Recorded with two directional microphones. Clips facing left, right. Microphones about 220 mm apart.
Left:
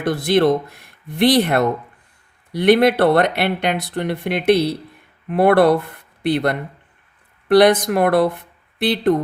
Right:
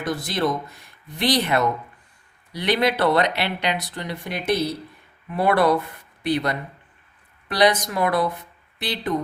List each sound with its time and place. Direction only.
0.0 s speech: 60° left (ahead or behind)